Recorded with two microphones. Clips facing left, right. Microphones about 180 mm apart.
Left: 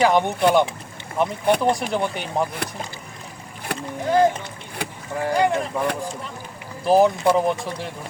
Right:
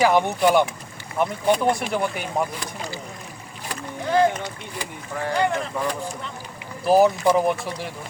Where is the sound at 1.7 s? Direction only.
Centre (ahead or behind).